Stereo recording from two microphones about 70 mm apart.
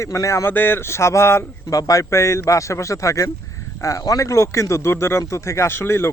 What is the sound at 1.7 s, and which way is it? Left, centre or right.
A man's voice, left.